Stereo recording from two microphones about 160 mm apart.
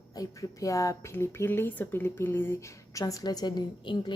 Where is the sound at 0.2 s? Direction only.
20° left (ahead or behind).